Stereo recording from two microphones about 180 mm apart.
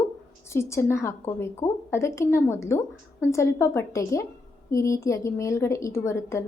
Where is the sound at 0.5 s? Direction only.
15° left (ahead or behind).